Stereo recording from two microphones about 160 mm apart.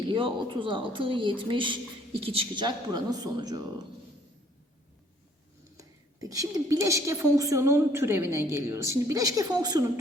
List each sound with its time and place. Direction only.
0.1 s a woman's voice: 30° right (ahead or behind)
5.7 s a woman's voice: 20° right (ahead or behind)